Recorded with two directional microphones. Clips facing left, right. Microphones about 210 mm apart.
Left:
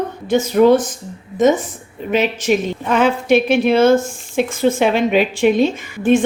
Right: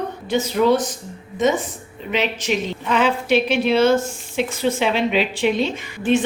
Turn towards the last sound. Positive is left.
turn(degrees=50)  # may be behind; listen again after turning